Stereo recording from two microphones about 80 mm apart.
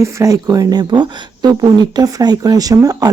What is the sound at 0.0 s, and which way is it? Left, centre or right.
Speech, right.